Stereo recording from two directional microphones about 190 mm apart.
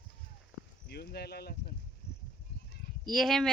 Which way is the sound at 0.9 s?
60° left (ahead or behind).